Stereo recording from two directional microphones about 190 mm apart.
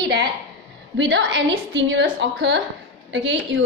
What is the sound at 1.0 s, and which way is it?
A woman's voice, 70° right (ahead or behind).